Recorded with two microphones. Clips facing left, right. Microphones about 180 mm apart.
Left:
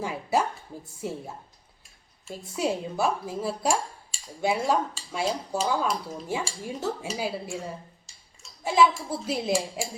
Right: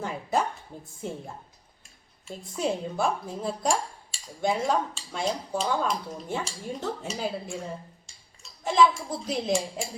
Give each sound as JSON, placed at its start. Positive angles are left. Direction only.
{"t": 0.0, "sound": "a sound", "side_deg": 10}
{"t": 2.2, "sound": "speech", "side_deg": 5}
{"t": 8.6, "sound": "speech", "side_deg": 5}